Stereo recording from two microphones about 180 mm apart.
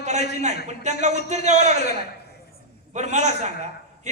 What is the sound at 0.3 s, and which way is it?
A man's voice, 40° right (ahead or behind).